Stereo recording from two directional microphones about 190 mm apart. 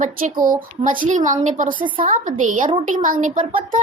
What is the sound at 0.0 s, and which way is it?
A woman's voice, 45° right (ahead or behind).